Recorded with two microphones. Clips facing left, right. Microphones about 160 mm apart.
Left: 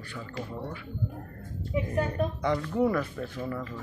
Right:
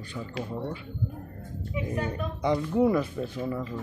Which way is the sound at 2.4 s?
15° right (ahead or behind).